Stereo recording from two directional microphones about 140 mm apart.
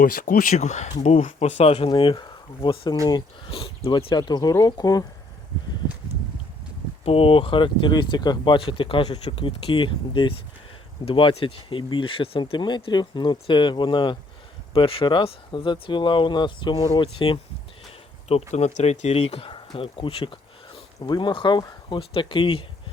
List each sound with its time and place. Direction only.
0.0 s speech: 90° left; by 1.9 s 45° left (ahead or behind)
1.9 s speech: 35° left (ahead or behind)
7.0 s speech: 40° left (ahead or behind)
18.3 s speech: 50° left (ahead or behind)